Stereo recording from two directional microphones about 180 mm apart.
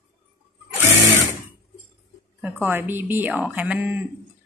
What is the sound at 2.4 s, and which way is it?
A woman's voice, 10° right (ahead or behind).